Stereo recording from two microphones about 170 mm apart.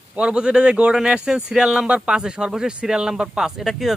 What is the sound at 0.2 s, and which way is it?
A man's voice, 5° right (ahead or behind).